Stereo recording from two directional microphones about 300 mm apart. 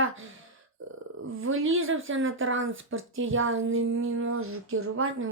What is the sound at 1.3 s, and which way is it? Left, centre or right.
Speech, right.